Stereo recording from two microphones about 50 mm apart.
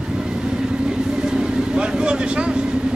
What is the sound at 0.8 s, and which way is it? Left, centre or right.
Vehicle, centre.